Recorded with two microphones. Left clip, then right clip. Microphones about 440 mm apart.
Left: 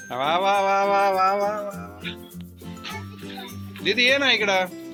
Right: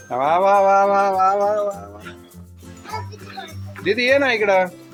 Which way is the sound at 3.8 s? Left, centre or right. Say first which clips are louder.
Right 3 dB; left.